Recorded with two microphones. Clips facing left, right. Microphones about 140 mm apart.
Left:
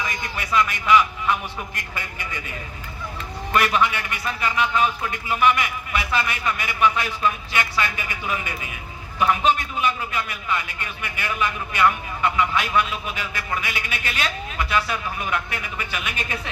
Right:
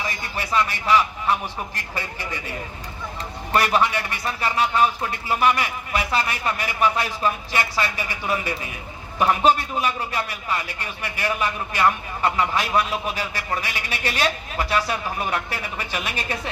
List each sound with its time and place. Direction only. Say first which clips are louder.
0.0 s a man's voice: even; 35° right (ahead or behind)
3.5 s a man's voice: right 1 dB; 35° right (ahead or behind)